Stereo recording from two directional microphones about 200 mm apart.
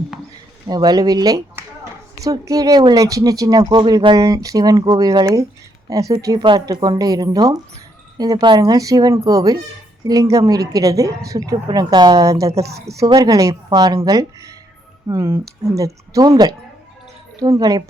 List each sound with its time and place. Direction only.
0.7 s speech: 20° right (ahead or behind)
17.4 s speech: 20° right (ahead or behind)